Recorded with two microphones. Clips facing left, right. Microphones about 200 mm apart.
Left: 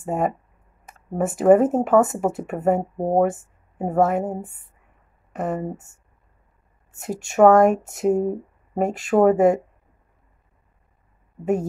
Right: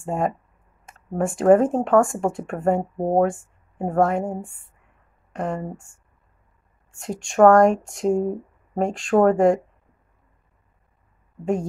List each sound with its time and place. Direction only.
0.0 s speech: centre (ahead or behind)
6.9 s speech: 5° left (ahead or behind)